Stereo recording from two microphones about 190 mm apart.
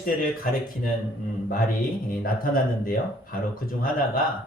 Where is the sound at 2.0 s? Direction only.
50° left (ahead or behind).